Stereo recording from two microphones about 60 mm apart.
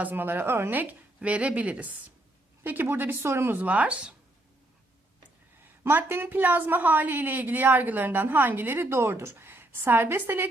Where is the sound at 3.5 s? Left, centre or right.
Right.